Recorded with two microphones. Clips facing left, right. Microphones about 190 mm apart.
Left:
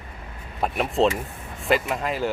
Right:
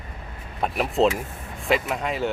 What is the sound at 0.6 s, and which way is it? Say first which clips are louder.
Speech: even; centre (ahead or behind).